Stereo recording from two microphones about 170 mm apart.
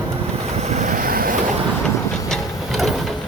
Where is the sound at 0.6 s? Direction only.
40° right (ahead or behind); by 1.3 s 55° right (ahead or behind).